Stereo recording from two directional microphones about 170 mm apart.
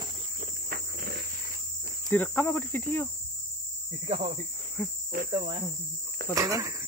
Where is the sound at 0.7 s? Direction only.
65° right (ahead or behind).